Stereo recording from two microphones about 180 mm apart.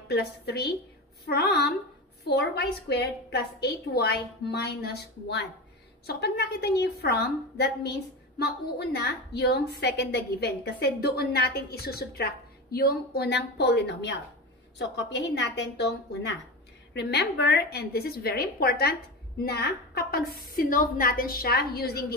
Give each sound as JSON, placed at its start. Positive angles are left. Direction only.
{"t": 0.1, "sound": "a woman's voice", "side_deg": 65}